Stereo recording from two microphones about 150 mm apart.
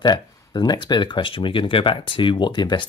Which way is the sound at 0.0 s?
30° left (ahead or behind).